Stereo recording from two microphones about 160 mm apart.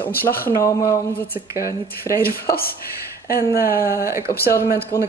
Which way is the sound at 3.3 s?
65° left (ahead or behind).